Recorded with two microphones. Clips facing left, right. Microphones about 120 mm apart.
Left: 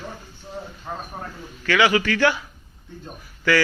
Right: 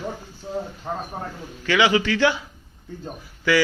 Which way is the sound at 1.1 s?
25° right (ahead or behind).